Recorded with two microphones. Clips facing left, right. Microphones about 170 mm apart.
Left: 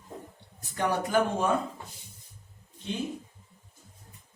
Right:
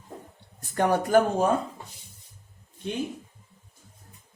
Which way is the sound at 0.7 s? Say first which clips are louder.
Right 5 dB; 50° right (ahead or behind).